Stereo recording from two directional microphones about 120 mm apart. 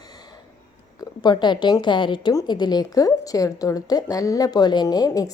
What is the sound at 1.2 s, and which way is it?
A woman's voice, 40° left (ahead or behind).